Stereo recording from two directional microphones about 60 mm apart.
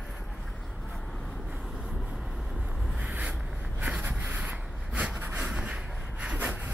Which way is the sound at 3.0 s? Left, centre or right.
Right.